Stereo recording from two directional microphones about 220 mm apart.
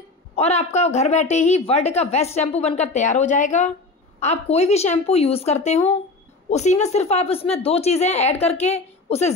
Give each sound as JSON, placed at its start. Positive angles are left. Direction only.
{"t": 0.4, "sound": "a woman's voice", "side_deg": 30}